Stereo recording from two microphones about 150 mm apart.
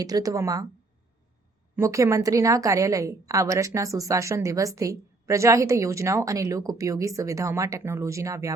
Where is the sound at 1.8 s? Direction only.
20° right (ahead or behind).